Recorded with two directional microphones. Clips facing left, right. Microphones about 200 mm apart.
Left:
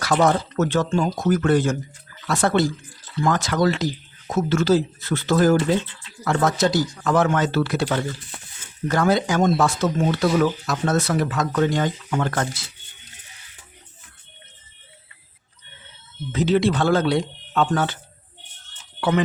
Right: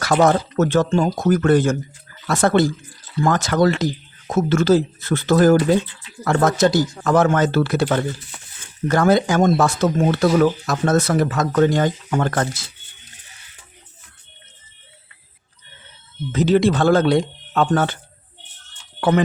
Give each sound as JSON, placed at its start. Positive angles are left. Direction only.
{"t": 0.0, "sound": "speech", "side_deg": -45}
{"t": 16.3, "sound": "speech", "side_deg": -45}
{"t": 18.9, "sound": "speech", "side_deg": -45}